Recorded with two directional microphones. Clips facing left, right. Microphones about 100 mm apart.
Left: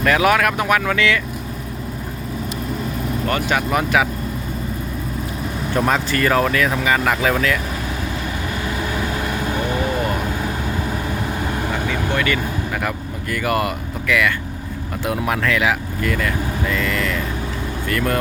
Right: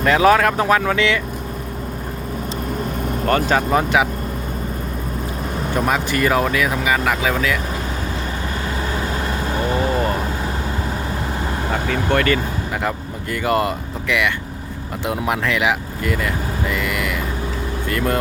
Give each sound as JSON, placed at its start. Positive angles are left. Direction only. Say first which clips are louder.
{"t": 0.0, "sound": "speech", "louder": "right 2 dB", "side_deg": -30}
{"t": 3.1, "sound": "speech", "louder": "right 3 dB", "side_deg": -40}
{"t": 5.7, "sound": "speech", "louder": "left 1 dB", "side_deg": -10}
{"t": 8.6, "sound": "vehicle", "louder": "left 1 dB", "side_deg": -30}
{"t": 12.1, "sound": "speech", "louder": "right 4 dB", "side_deg": -45}
{"t": 13.3, "sound": "speech", "louder": "right 2 dB", "side_deg": -25}